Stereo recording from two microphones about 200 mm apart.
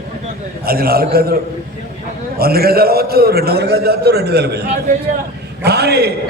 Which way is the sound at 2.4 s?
50° right (ahead or behind).